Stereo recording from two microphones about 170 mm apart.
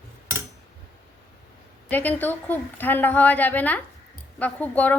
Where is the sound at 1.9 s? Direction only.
10° left (ahead or behind).